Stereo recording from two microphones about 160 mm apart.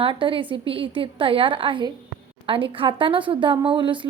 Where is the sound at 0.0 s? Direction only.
35° right (ahead or behind).